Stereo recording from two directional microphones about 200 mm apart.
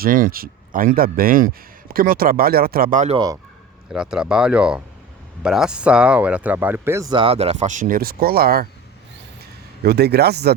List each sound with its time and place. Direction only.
0.0 s speech: 45° right (ahead or behind)
3.9 s speech: 5° right (ahead or behind); by 8.6 s 50° right (ahead or behind)
9.8 s speech: 55° right (ahead or behind)